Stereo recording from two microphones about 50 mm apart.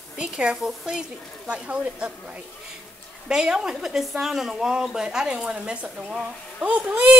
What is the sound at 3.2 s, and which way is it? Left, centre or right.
Speech, centre.